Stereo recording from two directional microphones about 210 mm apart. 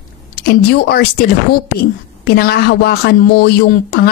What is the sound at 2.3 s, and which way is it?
Speech, 45° left (ahead or behind).